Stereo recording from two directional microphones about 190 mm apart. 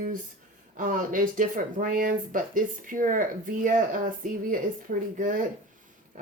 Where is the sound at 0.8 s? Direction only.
45° right (ahead or behind).